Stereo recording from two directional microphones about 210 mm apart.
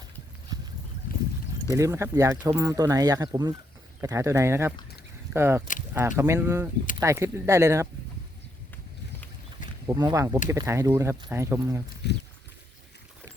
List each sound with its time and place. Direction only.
0.5 s a sound: 20° right (ahead or behind)
1.7 s speech: 15° right (ahead or behind)
9.8 s speech: 20° right (ahead or behind)
12.0 s speech: 55° left (ahead or behind)